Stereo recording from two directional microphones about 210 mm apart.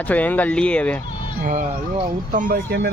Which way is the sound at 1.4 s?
40° right (ahead or behind).